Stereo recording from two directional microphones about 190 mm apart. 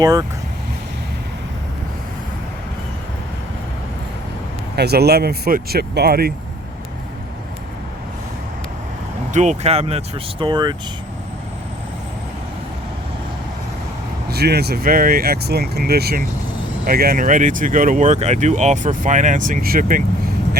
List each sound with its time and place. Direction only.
0.0 s speech: 20° right (ahead or behind)
4.8 s speech: 55° right (ahead or behind)
9.3 s speech: 40° right (ahead or behind)
14.3 s speech: 55° right (ahead or behind)